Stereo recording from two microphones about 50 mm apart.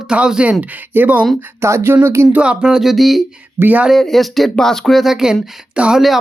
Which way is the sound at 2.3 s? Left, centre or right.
Right.